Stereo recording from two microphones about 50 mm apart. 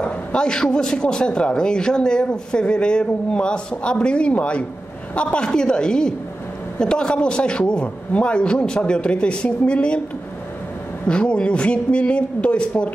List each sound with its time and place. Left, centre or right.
0.0 s a man's voice: centre
11.1 s a man's voice: left